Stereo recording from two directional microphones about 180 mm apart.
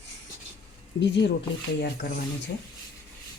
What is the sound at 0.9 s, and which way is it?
Speech, 80° left.